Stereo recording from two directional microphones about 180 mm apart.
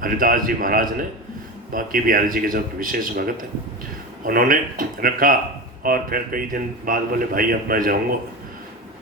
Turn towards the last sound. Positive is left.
turn(degrees=-55)  # may be behind; listen again after turning